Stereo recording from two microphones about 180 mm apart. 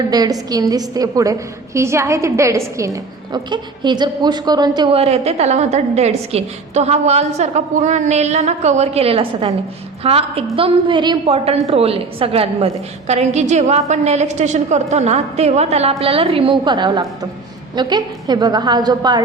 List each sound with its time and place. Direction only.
0.1 s a woman's voice: 20° right (ahead or behind)